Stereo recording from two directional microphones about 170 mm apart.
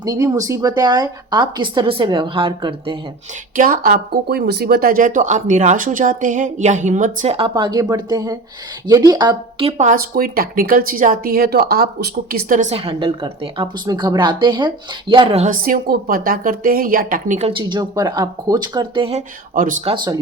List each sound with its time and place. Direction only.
0.0 s speech: 20° right (ahead or behind)
3.5 s speech: 55° right (ahead or behind)
7.3 s speech: 30° right (ahead or behind)
9.9 s speech: 60° right (ahead or behind)
12.7 s a woman's voice: 30° right (ahead or behind)
15.4 s speech: 55° right (ahead or behind)
17.5 s speech: 25° right (ahead or behind)
19.5 s speech: 50° right (ahead or behind)